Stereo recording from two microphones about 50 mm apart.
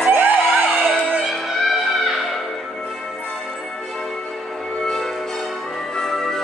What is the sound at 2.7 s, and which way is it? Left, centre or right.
Music, centre.